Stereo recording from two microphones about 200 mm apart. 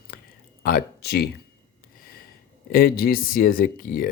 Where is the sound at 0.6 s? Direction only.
50° left (ahead or behind).